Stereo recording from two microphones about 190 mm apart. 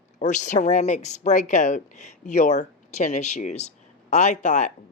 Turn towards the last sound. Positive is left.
turn(degrees=40)  # may be behind; listen again after turning